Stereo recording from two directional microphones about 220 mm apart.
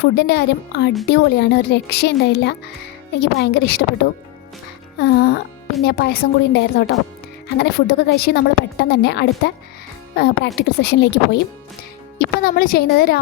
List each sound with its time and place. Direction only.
0.0 s speech: 50° left (ahead or behind)
4.9 s a woman's voice: 45° left (ahead or behind)